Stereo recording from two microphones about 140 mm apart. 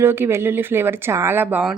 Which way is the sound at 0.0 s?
15° right (ahead or behind).